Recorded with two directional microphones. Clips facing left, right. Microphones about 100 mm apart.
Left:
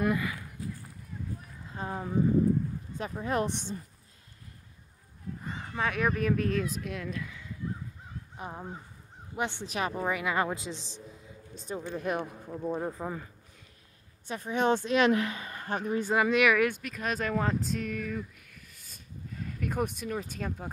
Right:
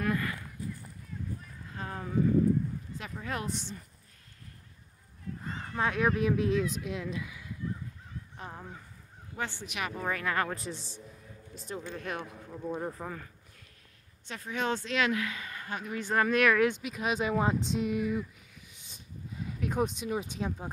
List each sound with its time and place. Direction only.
0.1 s speech: 5° left (ahead or behind)
1.7 s speech: 20° left (ahead or behind)
3.2 s speech: 25° left (ahead or behind)
5.4 s a sound: 5° left (ahead or behind)
5.8 s speech: centre (ahead or behind)
8.4 s speech: 15° left (ahead or behind)
9.7 s speech: 30° left (ahead or behind)
10.0 s speech: 10° left (ahead or behind)
10.6 s speech: centre (ahead or behind)
11.7 s speech: 15° left (ahead or behind); by 16.0 s 40° left (ahead or behind)
16.0 s speech: 10° left (ahead or behind)
16.8 s speech: 5° right (ahead or behind)
18.9 s a sound: 5° right (ahead or behind)
20.1 s speech: 5° right (ahead or behind)